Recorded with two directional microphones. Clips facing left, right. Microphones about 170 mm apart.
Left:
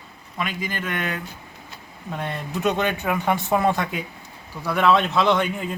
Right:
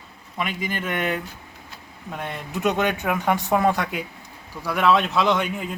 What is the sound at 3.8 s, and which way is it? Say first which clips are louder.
Speech: even; 5° right (ahead or behind).